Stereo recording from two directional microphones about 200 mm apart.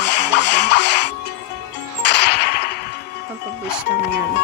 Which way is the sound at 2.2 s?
55° left (ahead or behind).